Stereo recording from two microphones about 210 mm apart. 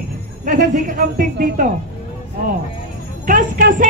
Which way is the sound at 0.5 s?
40° right (ahead or behind).